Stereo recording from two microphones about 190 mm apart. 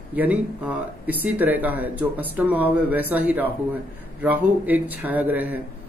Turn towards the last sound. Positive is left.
turn(degrees=-10)  # may be behind; listen again after turning